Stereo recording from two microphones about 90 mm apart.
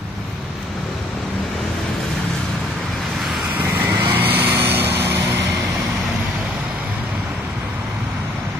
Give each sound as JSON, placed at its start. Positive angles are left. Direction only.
{"t": 3.5, "sound": "vehicle", "side_deg": -20}